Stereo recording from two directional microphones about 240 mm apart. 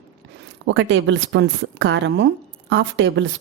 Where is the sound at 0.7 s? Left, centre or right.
Right.